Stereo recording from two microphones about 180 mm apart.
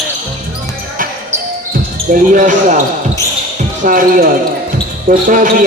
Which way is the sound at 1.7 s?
50° right (ahead or behind).